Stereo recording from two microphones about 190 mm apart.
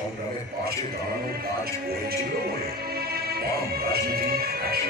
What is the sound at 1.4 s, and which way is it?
Speech, 55° right (ahead or behind).